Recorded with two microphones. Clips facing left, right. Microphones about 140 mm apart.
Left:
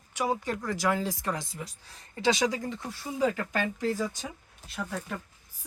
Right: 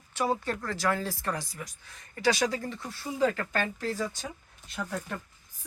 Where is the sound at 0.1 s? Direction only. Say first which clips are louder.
Even; 15° left (ahead or behind); by 2.0 s 30° left (ahead or behind).